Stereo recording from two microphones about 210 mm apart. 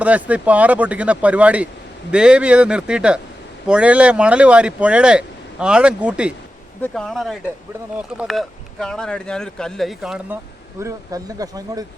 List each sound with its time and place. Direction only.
0.0 s speech: 5° right (ahead or behind)
10.8 s speech: 15° right (ahead or behind)